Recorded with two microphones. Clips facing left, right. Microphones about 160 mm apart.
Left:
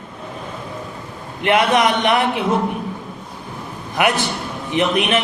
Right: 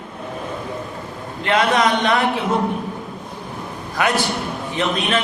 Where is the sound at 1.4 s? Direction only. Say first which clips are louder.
Left 2 dB; 20° left (ahead or behind).